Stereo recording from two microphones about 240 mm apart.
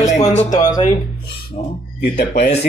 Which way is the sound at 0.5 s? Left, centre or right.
Centre.